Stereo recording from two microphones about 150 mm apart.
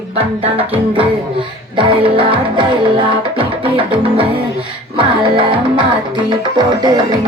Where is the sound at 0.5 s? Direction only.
40° right (ahead or behind).